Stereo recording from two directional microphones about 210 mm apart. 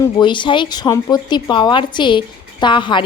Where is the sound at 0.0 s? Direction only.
20° left (ahead or behind).